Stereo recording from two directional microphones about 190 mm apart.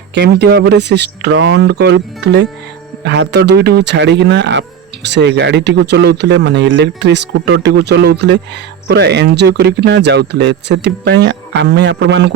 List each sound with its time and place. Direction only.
0.1 s speech: 65° right (ahead or behind)